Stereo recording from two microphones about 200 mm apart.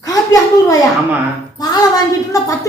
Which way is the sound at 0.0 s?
15° left (ahead or behind).